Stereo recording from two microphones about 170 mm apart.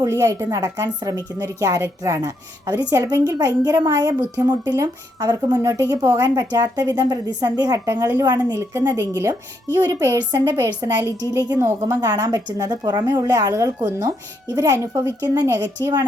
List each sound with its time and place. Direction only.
0.0 s a woman's voice: 20° right (ahead or behind)